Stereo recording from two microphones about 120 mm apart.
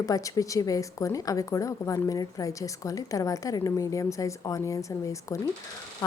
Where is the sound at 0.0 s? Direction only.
30° left (ahead or behind).